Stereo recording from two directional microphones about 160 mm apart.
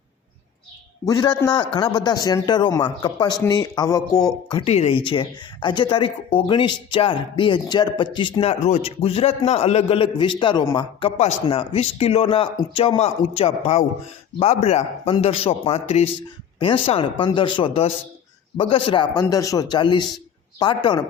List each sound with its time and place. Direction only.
1.0 s a man's voice: 25° left (ahead or behind)
11.2 s a man's voice: 40° left (ahead or behind)